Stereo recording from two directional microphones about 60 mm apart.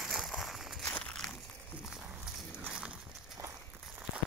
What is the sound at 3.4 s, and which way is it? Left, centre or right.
Walk, right.